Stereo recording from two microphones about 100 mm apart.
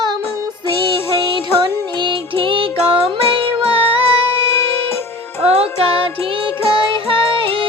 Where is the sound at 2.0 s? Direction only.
55° right (ahead or behind); by 4.0 s 70° right (ahead or behind).